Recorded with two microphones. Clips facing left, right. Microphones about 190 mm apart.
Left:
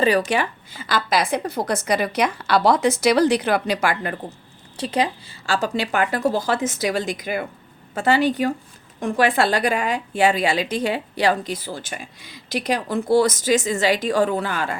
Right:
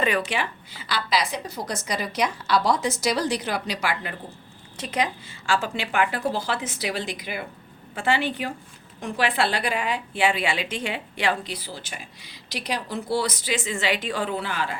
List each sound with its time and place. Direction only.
0.0 s a woman's voice: 40° left (ahead or behind)
4.8 s a woman's voice: 30° left (ahead or behind)